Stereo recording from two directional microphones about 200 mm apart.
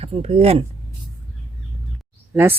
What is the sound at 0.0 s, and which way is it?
Speech, 30° right (ahead or behind).